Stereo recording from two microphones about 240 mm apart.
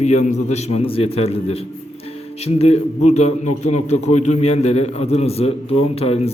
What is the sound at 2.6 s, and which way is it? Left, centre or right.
A man's voice, left.